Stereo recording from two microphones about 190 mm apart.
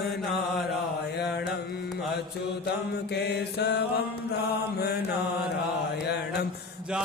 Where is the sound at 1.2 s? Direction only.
60° left (ahead or behind).